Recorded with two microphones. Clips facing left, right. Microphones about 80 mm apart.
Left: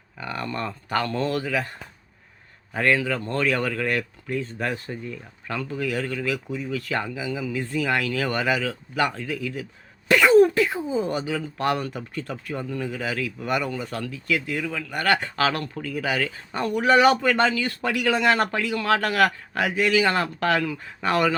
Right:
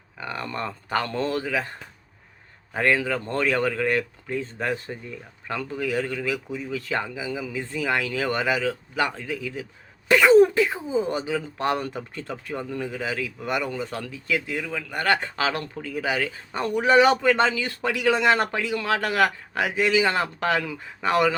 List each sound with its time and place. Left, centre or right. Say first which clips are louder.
0.2 s speech: left 1 dB; right
2.7 s a man's voice: even; right